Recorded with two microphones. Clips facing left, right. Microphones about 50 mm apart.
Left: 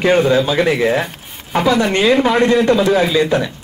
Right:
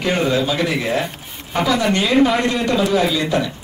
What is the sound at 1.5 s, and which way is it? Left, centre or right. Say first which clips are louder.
Speech: left 3 dB; left.